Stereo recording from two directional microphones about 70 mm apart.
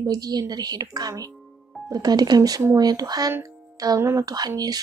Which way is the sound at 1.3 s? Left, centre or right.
Centre.